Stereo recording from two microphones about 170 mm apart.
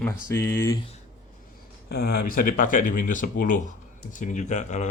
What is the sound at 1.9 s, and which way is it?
Speech, 65° left (ahead or behind).